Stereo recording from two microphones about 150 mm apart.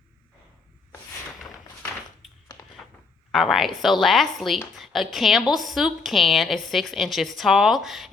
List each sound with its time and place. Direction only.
3.3 s a woman's voice: centre (ahead or behind)